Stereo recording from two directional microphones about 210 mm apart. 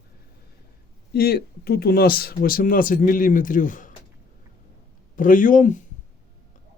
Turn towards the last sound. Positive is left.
turn(degrees=35)  # may be behind; listen again after turning